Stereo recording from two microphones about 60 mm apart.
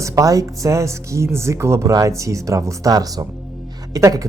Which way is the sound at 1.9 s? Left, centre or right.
Right.